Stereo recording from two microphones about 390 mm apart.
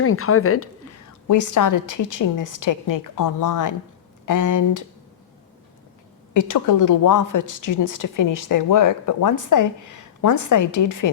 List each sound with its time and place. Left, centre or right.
0.0 s a woman's voice: left
1.3 s a woman's voice: left
6.3 s a woman's voice: left